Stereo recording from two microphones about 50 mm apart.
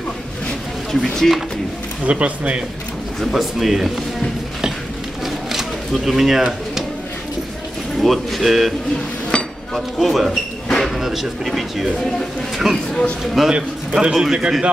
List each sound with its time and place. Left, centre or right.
1.0 s speech: centre
2.0 s speech: right
3.2 s speech: centre
5.2 s bird: centre
8.0 s speech: centre
9.3 s chink: centre
9.8 s speech: centre
13.5 s a man's voice: centre